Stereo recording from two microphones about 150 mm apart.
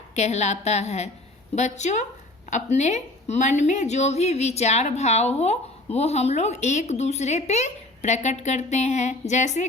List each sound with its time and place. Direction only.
0.2 s a woman's voice: 50° left (ahead or behind)